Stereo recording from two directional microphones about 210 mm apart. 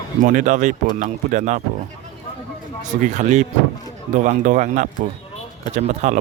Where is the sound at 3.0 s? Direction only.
35° right (ahead or behind).